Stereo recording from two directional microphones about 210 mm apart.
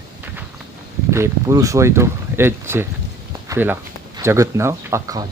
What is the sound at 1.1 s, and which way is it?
Speech, 15° right (ahead or behind).